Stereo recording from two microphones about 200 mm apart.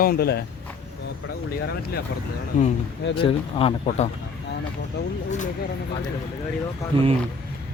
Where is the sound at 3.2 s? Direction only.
25° left (ahead or behind).